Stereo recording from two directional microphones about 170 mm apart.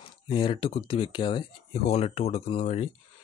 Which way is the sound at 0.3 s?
30° left (ahead or behind).